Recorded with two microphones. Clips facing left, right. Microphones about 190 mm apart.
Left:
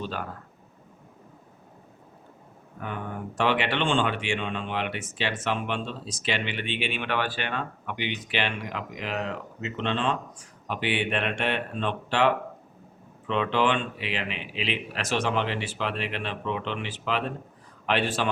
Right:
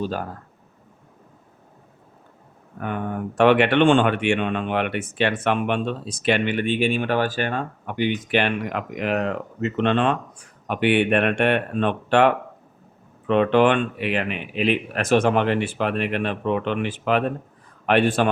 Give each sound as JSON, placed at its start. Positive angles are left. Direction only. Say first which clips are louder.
{"t": 0.0, "sound": "speech", "louder": "right 7 dB", "side_deg": -40}
{"t": 2.8, "sound": "speech", "louder": "right 7 dB", "side_deg": -55}